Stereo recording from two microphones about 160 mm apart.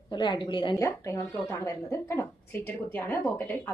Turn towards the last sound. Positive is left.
turn(degrees=15)  # may be behind; listen again after turning